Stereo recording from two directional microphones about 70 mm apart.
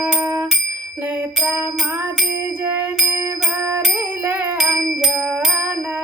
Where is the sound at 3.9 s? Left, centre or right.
Right.